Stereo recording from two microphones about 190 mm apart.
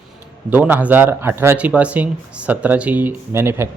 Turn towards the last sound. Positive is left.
turn(degrees=-15)  # may be behind; listen again after turning